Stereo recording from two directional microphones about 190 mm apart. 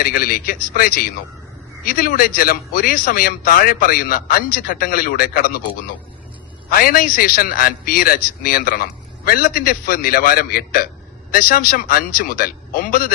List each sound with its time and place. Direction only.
0.0 s a man's voice: 50° left (ahead or behind)
6.7 s a man's voice: 50° left (ahead or behind)